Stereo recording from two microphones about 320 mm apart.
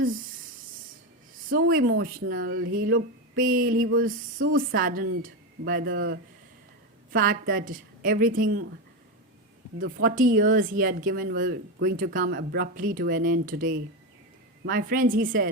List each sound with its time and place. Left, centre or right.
1.5 s speech: right
9.7 s speech: right